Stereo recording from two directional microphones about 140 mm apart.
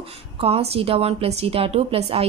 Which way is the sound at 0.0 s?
45° right (ahead or behind).